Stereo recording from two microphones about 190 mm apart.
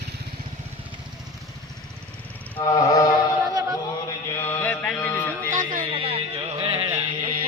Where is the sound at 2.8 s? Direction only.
15° left (ahead or behind).